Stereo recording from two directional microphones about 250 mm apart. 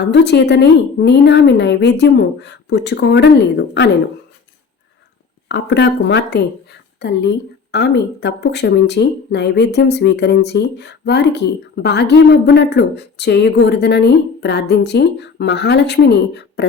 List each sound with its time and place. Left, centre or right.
0.0 s speech: left
5.5 s speech: left